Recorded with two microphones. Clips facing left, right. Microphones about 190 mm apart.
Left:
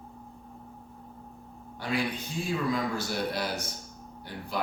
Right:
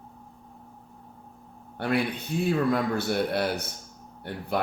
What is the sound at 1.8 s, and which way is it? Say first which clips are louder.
Speech: right 4 dB; 60° right (ahead or behind).